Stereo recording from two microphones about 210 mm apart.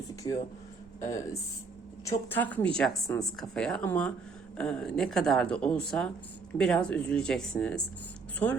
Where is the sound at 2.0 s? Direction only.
10° left (ahead or behind).